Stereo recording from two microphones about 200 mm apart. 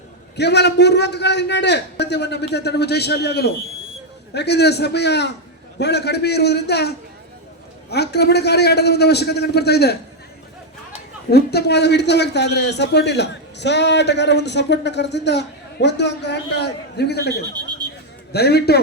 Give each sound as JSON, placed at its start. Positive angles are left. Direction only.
{"t": 0.3, "sound": "a man's voice", "side_deg": 55}
{"t": 11.3, "sound": "a man's voice", "side_deg": 55}